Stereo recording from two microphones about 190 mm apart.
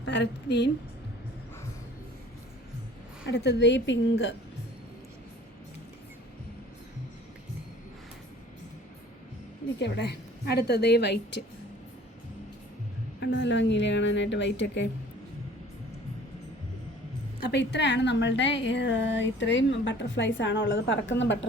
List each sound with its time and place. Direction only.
0.0 s a woman's voice: 65° left (ahead or behind)
3.2 s a woman's voice: 65° left (ahead or behind)
9.7 s a woman's voice: 65° left (ahead or behind)
13.1 s a woman's voice: 65° left (ahead or behind)
17.4 s a woman's voice: 65° left (ahead or behind)